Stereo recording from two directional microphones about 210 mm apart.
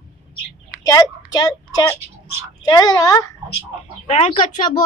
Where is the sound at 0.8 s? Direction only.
15° left (ahead or behind).